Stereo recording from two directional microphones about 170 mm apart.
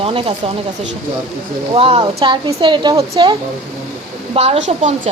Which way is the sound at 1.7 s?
35° right (ahead or behind).